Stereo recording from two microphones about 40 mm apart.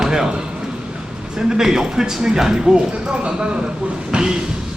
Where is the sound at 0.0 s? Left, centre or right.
Centre.